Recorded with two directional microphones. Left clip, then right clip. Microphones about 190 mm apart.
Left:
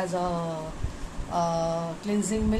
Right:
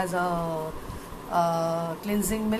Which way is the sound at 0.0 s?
10° right (ahead or behind).